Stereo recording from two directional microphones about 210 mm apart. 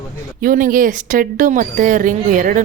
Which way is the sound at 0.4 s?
40° right (ahead or behind).